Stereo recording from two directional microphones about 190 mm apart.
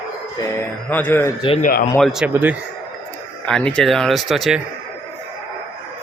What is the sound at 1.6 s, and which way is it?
Speech, 50° left (ahead or behind).